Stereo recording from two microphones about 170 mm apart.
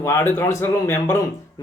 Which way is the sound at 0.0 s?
15° left (ahead or behind).